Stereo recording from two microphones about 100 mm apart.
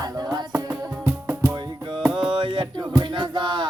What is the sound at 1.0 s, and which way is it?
Music, 20° right (ahead or behind).